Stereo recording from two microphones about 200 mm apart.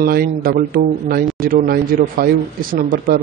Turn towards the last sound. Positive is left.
turn(degrees=-45)  # may be behind; listen again after turning